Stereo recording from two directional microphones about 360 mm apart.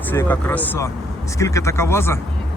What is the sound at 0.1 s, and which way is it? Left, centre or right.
Speech, centre.